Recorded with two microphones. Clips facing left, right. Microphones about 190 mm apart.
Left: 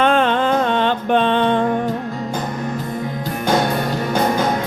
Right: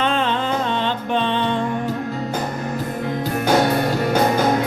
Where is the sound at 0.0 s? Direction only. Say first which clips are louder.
Left 5 dB; 55° left (ahead or behind).